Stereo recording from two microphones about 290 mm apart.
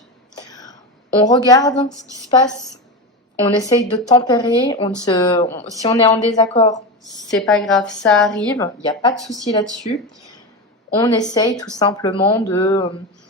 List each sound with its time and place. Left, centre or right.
0.5 s whispering: centre
1.2 s speech: centre
3.4 s speech: centre
7.3 s a woman's voice: centre
8.5 s speech: centre
11.0 s speech: centre